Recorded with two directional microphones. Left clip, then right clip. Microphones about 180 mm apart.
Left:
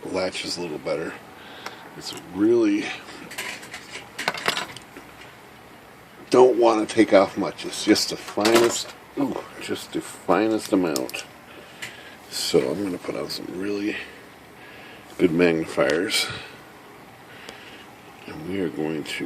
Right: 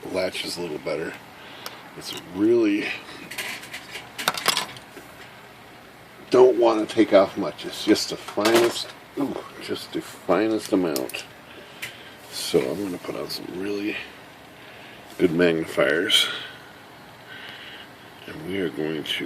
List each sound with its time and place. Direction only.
0.1 s speech: 15° left (ahead or behind)
2.4 s speech: 10° left (ahead or behind)
4.3 s coin: 45° right (ahead or behind)
6.3 s speech: 20° left (ahead or behind)
8.4 s speech: 50° left (ahead or behind)
8.7 s speech: 20° left (ahead or behind)
12.3 s speech: 15° left (ahead or behind)
15.2 s speech: 15° left (ahead or behind)
18.3 s speech: 15° left (ahead or behind)